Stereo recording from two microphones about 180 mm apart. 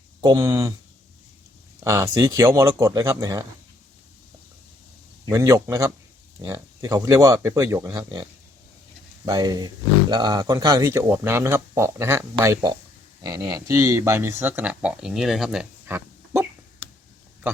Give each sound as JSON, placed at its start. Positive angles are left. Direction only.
{"t": 0.2, "sound": "speech", "side_deg": -20}
{"t": 1.8, "sound": "speech", "side_deg": -15}
{"t": 5.3, "sound": "speech", "side_deg": -15}
{"t": 15.9, "sound": "a sound", "side_deg": -15}